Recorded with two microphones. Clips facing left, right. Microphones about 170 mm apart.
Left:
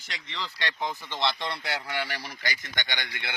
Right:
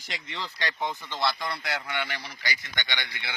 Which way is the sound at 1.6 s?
35° left (ahead or behind).